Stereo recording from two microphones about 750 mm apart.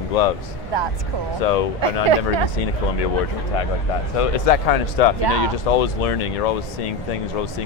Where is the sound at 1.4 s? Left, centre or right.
Left.